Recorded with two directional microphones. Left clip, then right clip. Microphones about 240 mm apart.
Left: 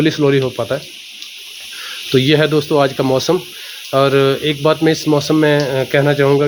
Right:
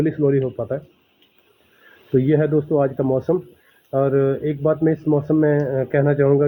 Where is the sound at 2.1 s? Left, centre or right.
Centre.